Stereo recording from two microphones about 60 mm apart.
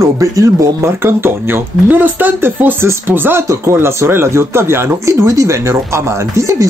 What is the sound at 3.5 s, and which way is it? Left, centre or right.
Speech, right.